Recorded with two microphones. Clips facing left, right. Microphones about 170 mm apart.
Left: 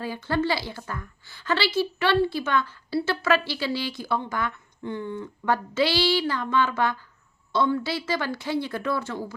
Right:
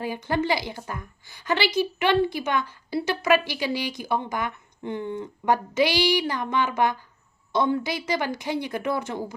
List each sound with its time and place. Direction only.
0.0 s a woman's voice: 15° right (ahead or behind)